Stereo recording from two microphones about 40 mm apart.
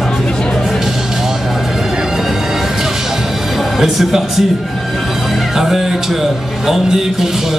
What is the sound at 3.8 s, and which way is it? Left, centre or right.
Speech, centre.